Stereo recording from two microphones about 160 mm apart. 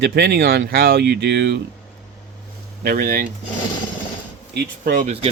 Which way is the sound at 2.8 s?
65° right (ahead or behind).